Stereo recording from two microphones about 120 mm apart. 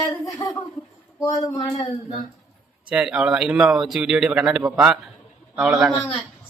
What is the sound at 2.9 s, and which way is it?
A man's voice, 5° right (ahead or behind).